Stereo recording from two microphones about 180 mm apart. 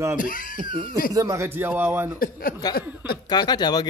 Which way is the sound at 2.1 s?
55° left (ahead or behind).